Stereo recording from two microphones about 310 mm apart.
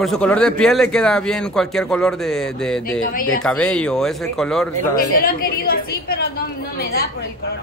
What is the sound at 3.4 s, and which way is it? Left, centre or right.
A man's voice, centre.